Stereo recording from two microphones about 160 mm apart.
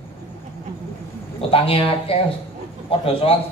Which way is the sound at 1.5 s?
35° left (ahead or behind).